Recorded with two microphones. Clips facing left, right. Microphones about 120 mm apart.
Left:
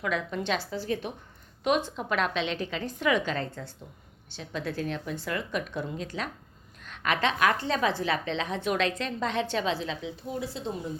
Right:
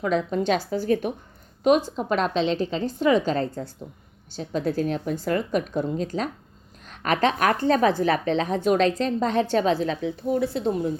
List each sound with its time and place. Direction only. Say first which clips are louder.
0.0 s a woman's voice: right 7 dB; 35° right (ahead or behind); by 10.9 s 60° right (ahead or behind)